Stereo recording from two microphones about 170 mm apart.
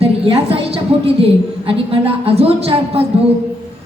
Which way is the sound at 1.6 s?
35° right (ahead or behind).